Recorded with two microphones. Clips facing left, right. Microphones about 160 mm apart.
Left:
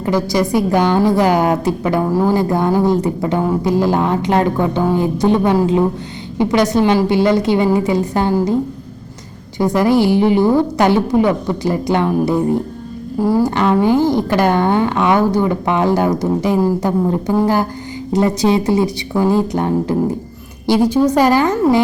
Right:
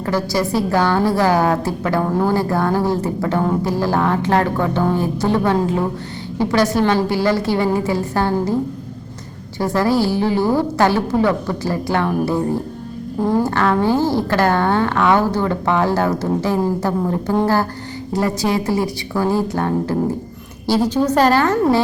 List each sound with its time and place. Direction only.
0.0 s a woman's voice: 15° left (ahead or behind)
2.0 s a woman's voice: 5° left (ahead or behind)
2.3 s a woman's voice: 20° left (ahead or behind)
9.6 s a woman's voice: 15° left (ahead or behind)
13.1 s a woman's voice: 5° left (ahead or behind)